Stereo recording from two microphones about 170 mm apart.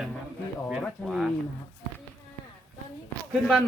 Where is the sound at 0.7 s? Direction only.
Centre (ahead or behind).